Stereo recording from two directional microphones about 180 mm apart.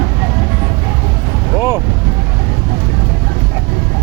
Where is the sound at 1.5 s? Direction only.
15° right (ahead or behind).